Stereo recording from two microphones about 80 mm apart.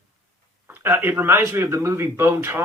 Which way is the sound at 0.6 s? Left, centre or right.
Right.